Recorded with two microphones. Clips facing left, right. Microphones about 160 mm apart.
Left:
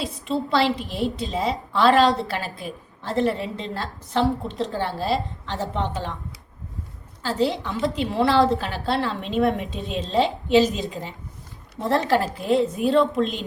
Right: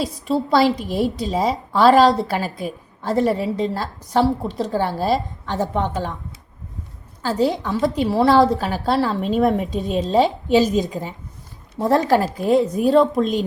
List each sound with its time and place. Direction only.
0.0 s a woman's voice: 40° right (ahead or behind)
7.3 s a woman's voice: 45° right (ahead or behind)